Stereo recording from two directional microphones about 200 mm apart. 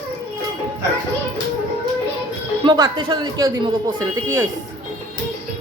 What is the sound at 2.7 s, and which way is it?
Speech, 20° right (ahead or behind).